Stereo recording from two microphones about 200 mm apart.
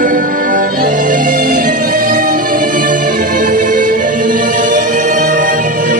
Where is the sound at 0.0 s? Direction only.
45° right (ahead or behind).